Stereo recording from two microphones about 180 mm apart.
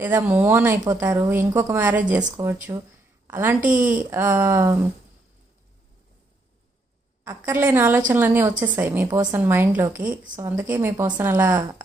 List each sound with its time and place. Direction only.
0.0 s a woman's voice: 10° right (ahead or behind)
3.6 s a woman's voice: 45° right (ahead or behind)
3.9 s a woman's voice: 10° right (ahead or behind)
7.3 s a woman's voice: 15° right (ahead or behind)
10.0 s a woman's voice: 45° right (ahead or behind)
10.3 s a woman's voice: 20° right (ahead or behind)